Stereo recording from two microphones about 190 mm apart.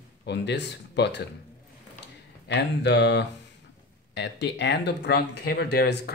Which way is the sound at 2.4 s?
65° left (ahead or behind).